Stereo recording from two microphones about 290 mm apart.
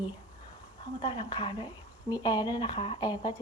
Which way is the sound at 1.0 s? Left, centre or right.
Centre.